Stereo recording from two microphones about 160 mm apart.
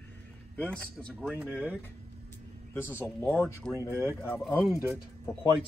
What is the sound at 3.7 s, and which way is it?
Speech, 15° right (ahead or behind).